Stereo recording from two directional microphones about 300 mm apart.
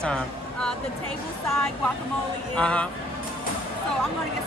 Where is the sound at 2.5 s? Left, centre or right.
Centre.